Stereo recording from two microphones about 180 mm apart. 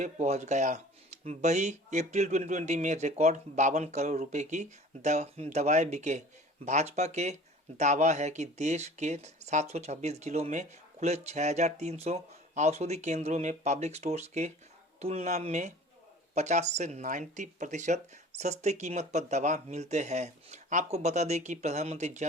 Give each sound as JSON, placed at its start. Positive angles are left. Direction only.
{"t": 0.0, "sound": "speech", "side_deg": -40}